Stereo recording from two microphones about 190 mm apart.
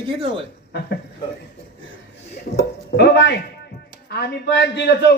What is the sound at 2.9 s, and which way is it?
A man's voice, 60° left (ahead or behind).